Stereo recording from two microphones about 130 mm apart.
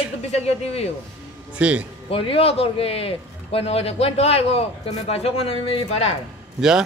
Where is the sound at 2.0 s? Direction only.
45° left (ahead or behind).